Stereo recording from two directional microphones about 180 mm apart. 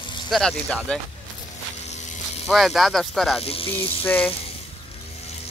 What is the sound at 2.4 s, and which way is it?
Speech, centre (ahead or behind).